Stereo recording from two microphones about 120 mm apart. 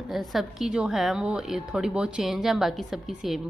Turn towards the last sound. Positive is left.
turn(degrees=0)  # may be behind; listen again after turning